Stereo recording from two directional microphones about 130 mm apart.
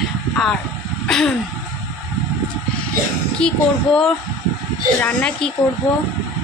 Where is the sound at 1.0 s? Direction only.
5° left (ahead or behind).